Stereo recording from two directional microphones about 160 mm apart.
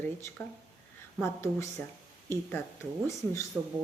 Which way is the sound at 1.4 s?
20° left (ahead or behind).